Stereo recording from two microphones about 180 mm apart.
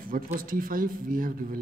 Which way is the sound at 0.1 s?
50° right (ahead or behind).